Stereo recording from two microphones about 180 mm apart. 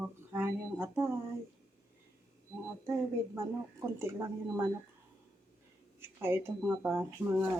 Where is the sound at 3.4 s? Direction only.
15° right (ahead or behind).